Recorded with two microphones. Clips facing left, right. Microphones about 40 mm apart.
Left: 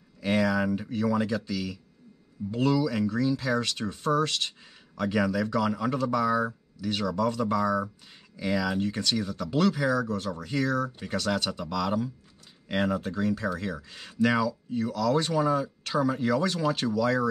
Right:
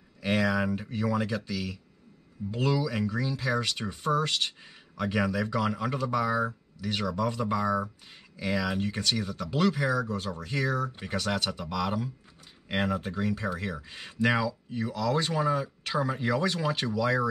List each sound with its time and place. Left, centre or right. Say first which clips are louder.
0.2 s speech: left 1 dB; centre